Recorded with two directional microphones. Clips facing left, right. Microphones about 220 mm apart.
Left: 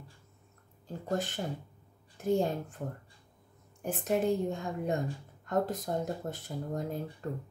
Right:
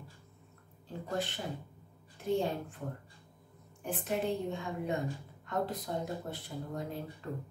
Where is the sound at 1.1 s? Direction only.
45° left (ahead or behind).